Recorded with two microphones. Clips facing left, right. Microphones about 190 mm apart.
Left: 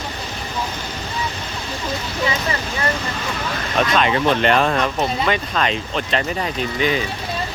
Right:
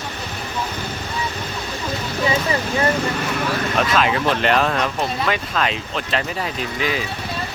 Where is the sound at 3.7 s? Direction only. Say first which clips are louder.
Left 3 dB; 5° right (ahead or behind).